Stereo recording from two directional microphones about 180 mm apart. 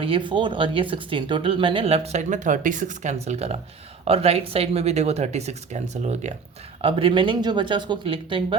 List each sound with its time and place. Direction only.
0.0 s speech: 30° right (ahead or behind)